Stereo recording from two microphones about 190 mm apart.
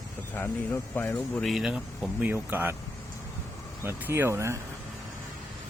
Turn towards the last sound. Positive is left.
turn(degrees=-15)  # may be behind; listen again after turning